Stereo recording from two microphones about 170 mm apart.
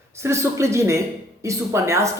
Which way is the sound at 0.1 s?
15° right (ahead or behind).